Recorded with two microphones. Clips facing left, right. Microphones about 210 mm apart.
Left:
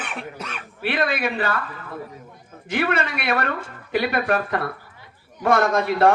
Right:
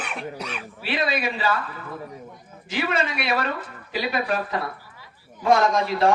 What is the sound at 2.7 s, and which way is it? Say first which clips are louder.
Speech: left 2 dB; 55° left (ahead or behind).